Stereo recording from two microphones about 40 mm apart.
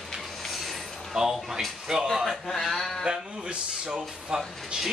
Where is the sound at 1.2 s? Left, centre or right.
Centre.